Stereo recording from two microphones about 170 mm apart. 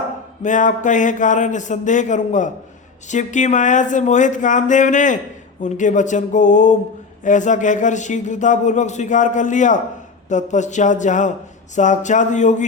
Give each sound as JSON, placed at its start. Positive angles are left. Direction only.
{"t": 0.4, "sound": "a man's voice", "side_deg": 45}